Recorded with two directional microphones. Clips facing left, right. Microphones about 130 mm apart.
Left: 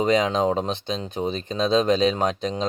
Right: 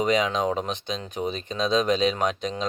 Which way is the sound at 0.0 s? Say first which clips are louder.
Left 3 dB; 35° left (ahead or behind).